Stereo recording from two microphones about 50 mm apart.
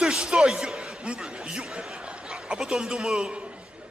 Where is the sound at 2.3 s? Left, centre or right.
Centre.